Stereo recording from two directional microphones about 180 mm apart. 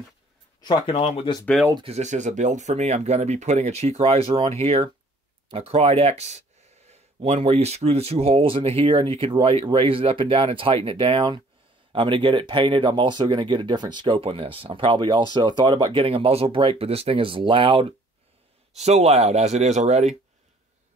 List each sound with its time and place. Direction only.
0.6 s speech: 25° left (ahead or behind)
1.4 s speech: centre (ahead or behind)
1.9 s speech: 40° right (ahead or behind)